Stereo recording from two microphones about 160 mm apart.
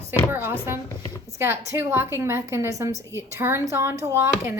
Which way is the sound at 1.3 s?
15° right (ahead or behind).